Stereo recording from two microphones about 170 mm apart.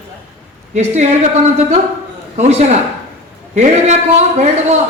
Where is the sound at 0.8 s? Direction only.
40° right (ahead or behind).